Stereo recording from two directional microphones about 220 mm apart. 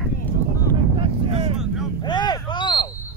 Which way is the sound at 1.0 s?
30° right (ahead or behind).